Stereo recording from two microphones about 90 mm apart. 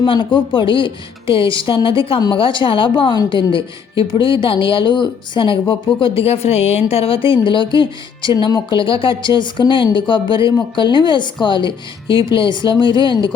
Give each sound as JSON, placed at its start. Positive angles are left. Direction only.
{"t": 0.0, "sound": "a woman's voice", "side_deg": 60}
{"t": 8.8, "sound": "speech", "side_deg": 75}